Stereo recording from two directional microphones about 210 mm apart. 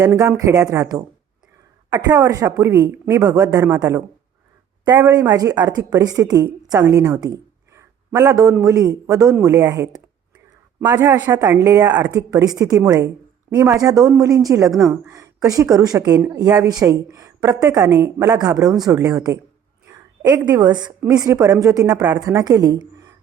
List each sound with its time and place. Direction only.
0.0 s a woman's voice: 15° right (ahead or behind)
19.9 s a sound: 15° right (ahead or behind)
20.4 s a woman's voice: 15° right (ahead or behind)